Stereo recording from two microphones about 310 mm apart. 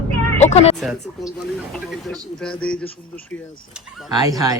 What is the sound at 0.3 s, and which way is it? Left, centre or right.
Music, left.